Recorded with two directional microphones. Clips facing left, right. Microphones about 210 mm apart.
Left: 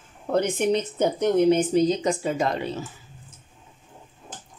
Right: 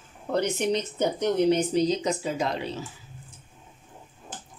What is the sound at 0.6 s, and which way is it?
Speech, 50° left (ahead or behind).